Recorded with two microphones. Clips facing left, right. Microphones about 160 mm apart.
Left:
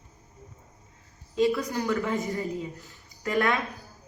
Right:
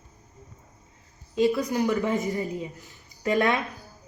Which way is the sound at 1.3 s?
20° right (ahead or behind).